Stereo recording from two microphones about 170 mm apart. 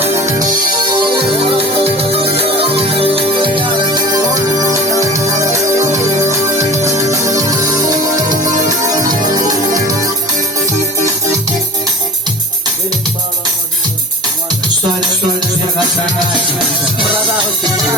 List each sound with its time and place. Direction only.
0.0 s music: 15° right (ahead or behind)
0.7 s music: 30° right (ahead or behind)
9.0 s music: 25° right (ahead or behind)
17.3 s music: 25° right (ahead or behind)